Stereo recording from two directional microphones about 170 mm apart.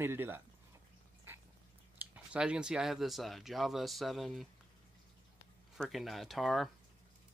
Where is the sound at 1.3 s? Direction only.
10° right (ahead or behind).